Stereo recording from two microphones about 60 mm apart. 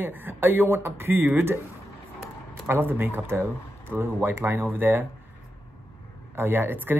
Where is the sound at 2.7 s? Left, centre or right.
Right.